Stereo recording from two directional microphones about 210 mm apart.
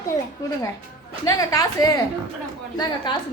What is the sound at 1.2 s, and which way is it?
A woman's voice, 15° left (ahead or behind).